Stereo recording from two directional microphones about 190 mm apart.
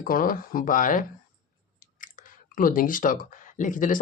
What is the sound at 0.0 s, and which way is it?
Speech, 50° left (ahead or behind).